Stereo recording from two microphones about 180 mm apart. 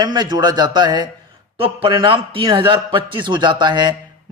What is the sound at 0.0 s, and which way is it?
A man's voice, 20° right (ahead or behind).